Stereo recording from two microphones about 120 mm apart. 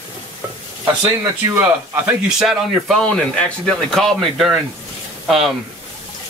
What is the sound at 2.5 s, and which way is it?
Speech, 5° left (ahead or behind).